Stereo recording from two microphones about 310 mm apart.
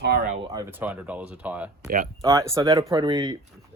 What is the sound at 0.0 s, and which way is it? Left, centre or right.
Speech, right.